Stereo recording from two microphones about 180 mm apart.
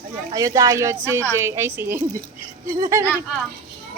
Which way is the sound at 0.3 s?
20° right (ahead or behind).